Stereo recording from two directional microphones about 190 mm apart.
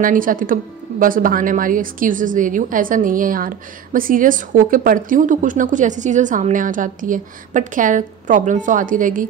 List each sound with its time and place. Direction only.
0.0 s a woman's voice: 45° right (ahead or behind)